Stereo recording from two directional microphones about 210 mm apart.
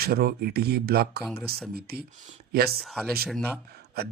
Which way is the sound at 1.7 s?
50° right (ahead or behind).